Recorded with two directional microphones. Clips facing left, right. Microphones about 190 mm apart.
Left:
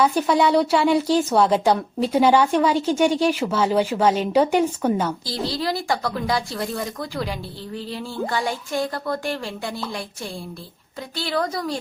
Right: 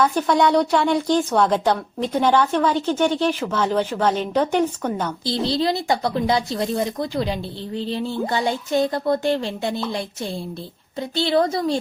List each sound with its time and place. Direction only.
0.0 s a woman's voice: 5° left (ahead or behind)
5.2 s a woman's voice: 25° right (ahead or behind)
11.1 s a woman's voice: 25° right (ahead or behind)